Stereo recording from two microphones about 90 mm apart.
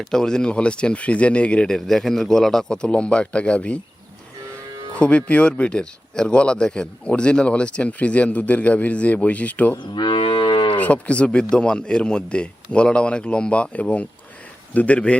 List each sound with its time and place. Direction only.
0.0 s speech: 5° left (ahead or behind)
4.9 s speech: 15° left (ahead or behind)
9.7 s moo: 60° left (ahead or behind)
10.8 s speech: 15° left (ahead or behind)